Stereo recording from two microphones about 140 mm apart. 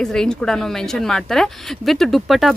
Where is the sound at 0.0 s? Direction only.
5° left (ahead or behind).